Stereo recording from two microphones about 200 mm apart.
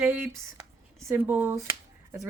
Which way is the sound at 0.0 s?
10° right (ahead or behind).